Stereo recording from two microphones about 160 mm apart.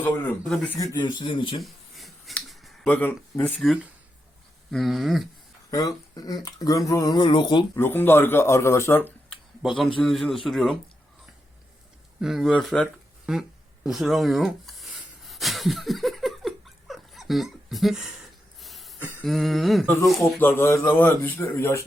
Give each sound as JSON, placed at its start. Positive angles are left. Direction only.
{"t": 0.0, "sound": "speech", "side_deg": 10}
{"t": 0.4, "sound": "a man's voice", "side_deg": 0}
{"t": 0.9, "sound": "speech", "side_deg": 30}
{"t": 1.6, "sound": "finger snapping", "side_deg": 0}
{"t": 2.8, "sound": "speech", "side_deg": 10}
{"t": 4.7, "sound": "a man's voice", "side_deg": 0}
{"t": 5.7, "sound": "speech", "side_deg": 20}
{"t": 7.8, "sound": "speech", "side_deg": 15}
{"t": 9.6, "sound": "a man's voice", "side_deg": 0}
{"t": 12.2, "sound": "a man's voice", "side_deg": 0}
{"t": 13.3, "sound": "a man's voice", "side_deg": -5}
{"t": 13.8, "sound": "a sound", "side_deg": 0}
{"t": 19.2, "sound": "a man's voice", "side_deg": 0}
{"t": 20.2, "sound": "speech", "side_deg": 15}